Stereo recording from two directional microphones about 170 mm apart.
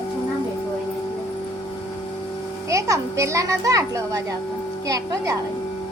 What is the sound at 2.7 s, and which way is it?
A child's voice, 20° right (ahead or behind).